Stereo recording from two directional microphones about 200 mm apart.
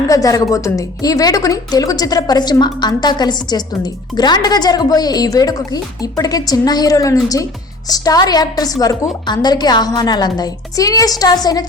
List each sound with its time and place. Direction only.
0.1 s a woman's voice: 15° left (ahead or behind)